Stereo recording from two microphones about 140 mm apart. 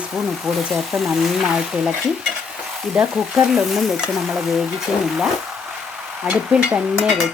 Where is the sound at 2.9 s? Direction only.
5° right (ahead or behind).